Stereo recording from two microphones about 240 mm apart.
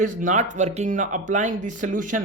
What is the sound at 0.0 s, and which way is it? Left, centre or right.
Speech, right.